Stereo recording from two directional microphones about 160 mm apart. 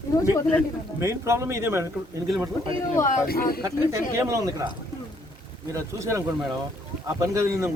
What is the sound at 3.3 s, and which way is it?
Speech, 75° left (ahead or behind).